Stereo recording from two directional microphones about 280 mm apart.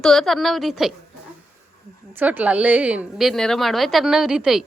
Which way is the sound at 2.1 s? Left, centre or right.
Centre.